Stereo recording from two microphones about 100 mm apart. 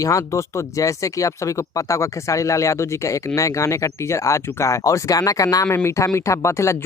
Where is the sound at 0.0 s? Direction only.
35° left (ahead or behind).